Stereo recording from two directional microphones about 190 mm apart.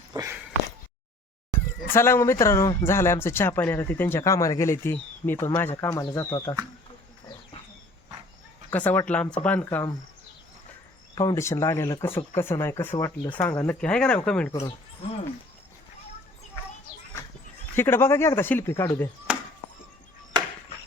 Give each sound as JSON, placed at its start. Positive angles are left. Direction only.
{"t": 0.1, "sound": "speech", "side_deg": -20}
{"t": 1.5, "sound": "speech", "side_deg": 10}
{"t": 8.7, "sound": "speech", "side_deg": 10}
{"t": 11.1, "sound": "speech", "side_deg": 20}
{"t": 17.7, "sound": "speech", "side_deg": 10}
{"t": 19.3, "sound": "a sound", "side_deg": -5}